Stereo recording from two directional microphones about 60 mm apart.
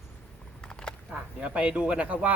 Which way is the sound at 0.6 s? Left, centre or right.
Centre.